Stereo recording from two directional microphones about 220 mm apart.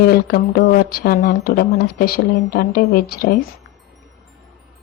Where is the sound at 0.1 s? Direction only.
45° left (ahead or behind).